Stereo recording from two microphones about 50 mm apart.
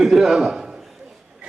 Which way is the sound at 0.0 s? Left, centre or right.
Centre.